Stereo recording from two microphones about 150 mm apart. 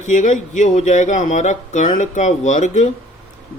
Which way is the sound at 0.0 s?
55° left (ahead or behind).